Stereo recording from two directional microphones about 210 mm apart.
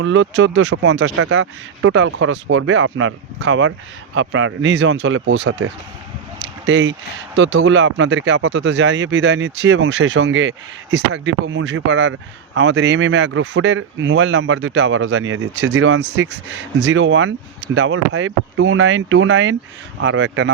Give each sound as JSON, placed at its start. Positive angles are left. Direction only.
{"t": 0.0, "sound": "speech", "side_deg": -65}